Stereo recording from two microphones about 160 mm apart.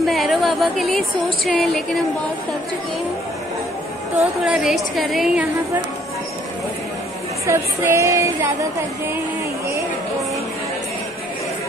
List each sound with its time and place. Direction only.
0.0 s speech: centre (ahead or behind)
4.4 s a woman's voice: 5° right (ahead or behind)
7.4 s music: 20° right (ahead or behind)